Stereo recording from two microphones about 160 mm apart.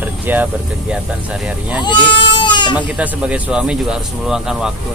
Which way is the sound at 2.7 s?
10° right (ahead or behind).